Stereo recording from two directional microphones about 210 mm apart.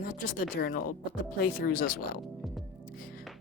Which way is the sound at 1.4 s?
45° left (ahead or behind).